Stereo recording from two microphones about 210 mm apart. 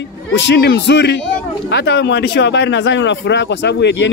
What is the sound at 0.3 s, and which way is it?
Speech, 55° left (ahead or behind).